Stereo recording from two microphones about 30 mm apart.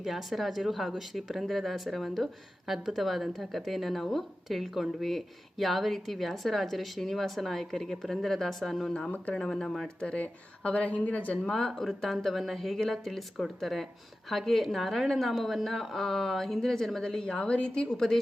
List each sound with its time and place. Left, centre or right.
0.0 s speech: centre
2.6 s speech: centre
10.2 s speech: left
11.4 s a woman's voice: centre
11.7 s speech: centre
17.0 s a woman's voice: left
17.9 s speech: centre